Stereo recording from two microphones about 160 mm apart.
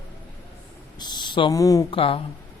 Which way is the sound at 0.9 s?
25° left (ahead or behind).